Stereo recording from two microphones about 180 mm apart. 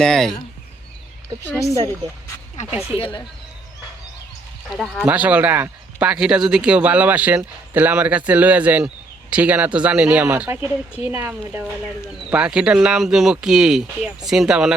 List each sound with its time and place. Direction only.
0.0 s speech: centre (ahead or behind)
2.6 s speech: 35° left (ahead or behind)
5.0 s speech: 10° right (ahead or behind)